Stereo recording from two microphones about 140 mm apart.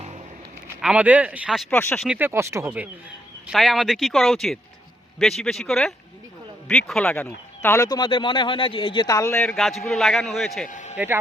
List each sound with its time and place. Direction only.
0.8 s speech: 5° right (ahead or behind)
1.7 s speech: 15° left (ahead or behind)
2.0 s speech: 15° right (ahead or behind)
3.4 s a man's voice: centre (ahead or behind); by 7.9 s 15° left (ahead or behind)
7.9 s speech: 30° left (ahead or behind)
9.4 s a man's voice: 5° left (ahead or behind)
10.7 s speech: 65° left (ahead or behind)
10.9 s speech: 15° right (ahead or behind)